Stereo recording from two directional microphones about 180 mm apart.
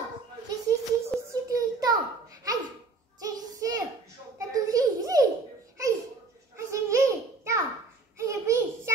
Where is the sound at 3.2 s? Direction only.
20° right (ahead or behind).